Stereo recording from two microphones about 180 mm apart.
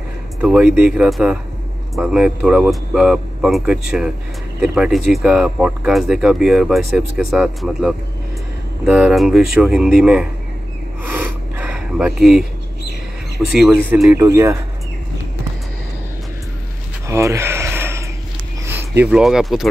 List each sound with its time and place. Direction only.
0.4 s speech: 5° right (ahead or behind)
11.1 s rub: 10° right (ahead or behind)
13.4 s speech: 5° right (ahead or behind)
17.1 s a sound: 15° right (ahead or behind)
18.7 s speech: 10° right (ahead or behind)